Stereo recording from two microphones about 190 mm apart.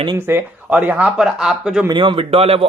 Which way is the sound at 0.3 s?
10° right (ahead or behind).